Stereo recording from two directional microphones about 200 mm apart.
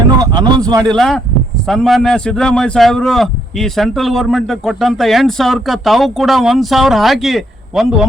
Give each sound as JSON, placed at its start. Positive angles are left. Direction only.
{"t": 0.2, "sound": "a man's voice", "side_deg": -20}
{"t": 0.9, "sound": "speech", "side_deg": 0}